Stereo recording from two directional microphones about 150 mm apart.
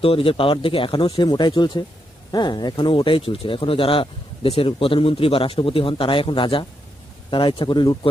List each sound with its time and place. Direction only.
0.0 s speech: 35° left (ahead or behind)